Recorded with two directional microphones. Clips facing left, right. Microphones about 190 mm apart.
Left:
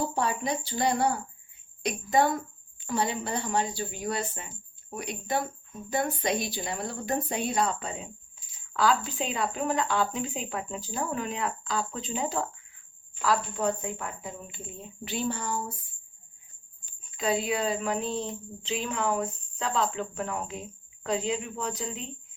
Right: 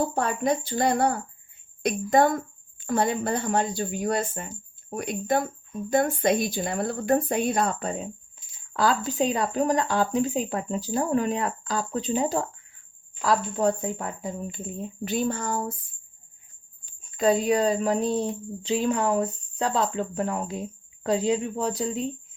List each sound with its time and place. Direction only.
0.1 s a woman's voice: 55° right (ahead or behind)
17.2 s a woman's voice: 45° right (ahead or behind)